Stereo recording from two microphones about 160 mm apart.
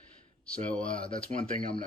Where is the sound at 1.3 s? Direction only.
55° right (ahead or behind).